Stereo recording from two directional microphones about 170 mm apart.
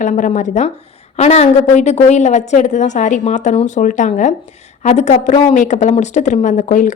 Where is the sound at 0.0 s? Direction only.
50° left (ahead or behind).